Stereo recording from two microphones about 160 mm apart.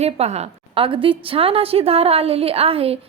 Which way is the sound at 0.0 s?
40° right (ahead or behind).